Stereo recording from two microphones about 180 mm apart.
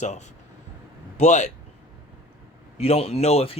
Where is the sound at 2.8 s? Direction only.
35° left (ahead or behind).